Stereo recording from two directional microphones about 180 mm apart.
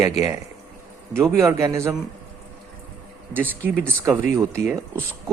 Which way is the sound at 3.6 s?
10° right (ahead or behind).